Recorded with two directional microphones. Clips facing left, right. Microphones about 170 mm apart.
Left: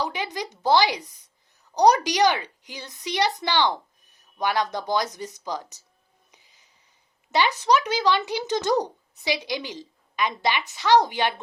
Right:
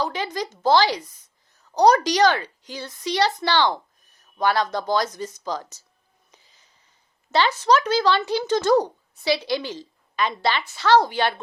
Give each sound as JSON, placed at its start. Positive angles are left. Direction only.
{"t": 0.0, "sound": "speech", "side_deg": 15}
{"t": 6.3, "sound": "a sound", "side_deg": 15}
{"t": 7.3, "sound": "speech", "side_deg": 15}